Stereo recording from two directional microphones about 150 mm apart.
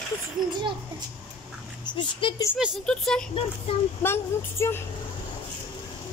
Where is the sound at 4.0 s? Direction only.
15° left (ahead or behind).